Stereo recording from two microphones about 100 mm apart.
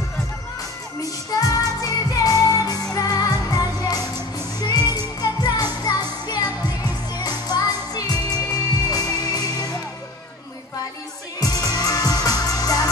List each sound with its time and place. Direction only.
1.4 s music: 35° left (ahead or behind)
11.3 s music: 40° left (ahead or behind)